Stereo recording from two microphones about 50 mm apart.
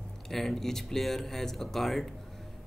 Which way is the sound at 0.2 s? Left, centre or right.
Centre.